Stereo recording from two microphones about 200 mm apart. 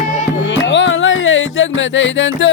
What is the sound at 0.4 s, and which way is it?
Music, 65° left (ahead or behind).